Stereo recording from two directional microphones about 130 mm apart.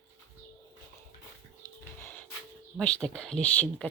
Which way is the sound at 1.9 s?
15° left (ahead or behind).